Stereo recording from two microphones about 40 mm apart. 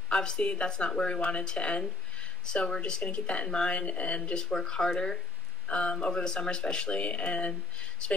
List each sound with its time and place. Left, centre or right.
0.1 s speech: left
3.4 s speech: centre
3.7 s speech: left
4.2 s speech: centre
5.7 s speech: left